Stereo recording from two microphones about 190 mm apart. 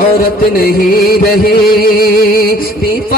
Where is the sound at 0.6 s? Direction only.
50° left (ahead or behind).